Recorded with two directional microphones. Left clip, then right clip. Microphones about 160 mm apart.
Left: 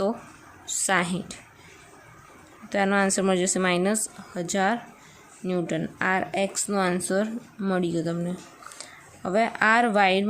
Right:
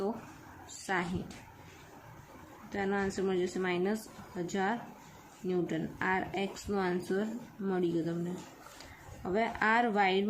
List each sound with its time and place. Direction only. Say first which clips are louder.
0.7 s a woman's voice: left 10 dB; 40° left (ahead or behind)
2.6 s speech: left 11 dB; 60° left (ahead or behind); by 10.2 s 45° left (ahead or behind)